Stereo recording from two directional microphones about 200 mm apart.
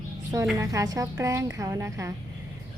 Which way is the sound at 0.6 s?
15° right (ahead or behind).